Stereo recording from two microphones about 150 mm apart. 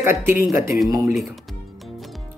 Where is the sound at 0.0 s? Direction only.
15° right (ahead or behind).